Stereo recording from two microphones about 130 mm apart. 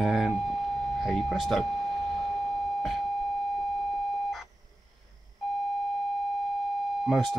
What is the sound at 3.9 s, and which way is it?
Beep, centre (ahead or behind).